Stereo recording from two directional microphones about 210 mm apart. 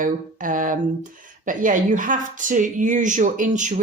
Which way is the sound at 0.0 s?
40° right (ahead or behind).